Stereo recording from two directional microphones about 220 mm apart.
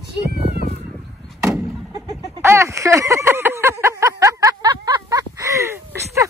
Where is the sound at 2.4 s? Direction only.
10° right (ahead or behind).